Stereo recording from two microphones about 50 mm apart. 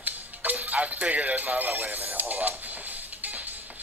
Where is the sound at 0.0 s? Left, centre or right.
Right.